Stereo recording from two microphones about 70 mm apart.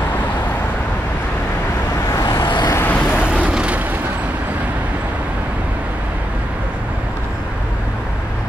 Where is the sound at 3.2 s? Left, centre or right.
Centre.